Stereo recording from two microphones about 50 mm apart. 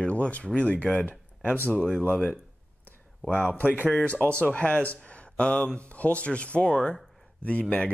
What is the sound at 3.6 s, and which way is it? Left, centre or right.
Speech, left.